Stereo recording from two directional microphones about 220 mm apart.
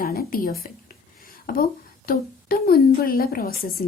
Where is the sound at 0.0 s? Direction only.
40° left (ahead or behind).